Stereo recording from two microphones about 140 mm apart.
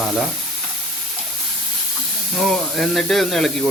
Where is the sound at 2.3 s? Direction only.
Centre (ahead or behind).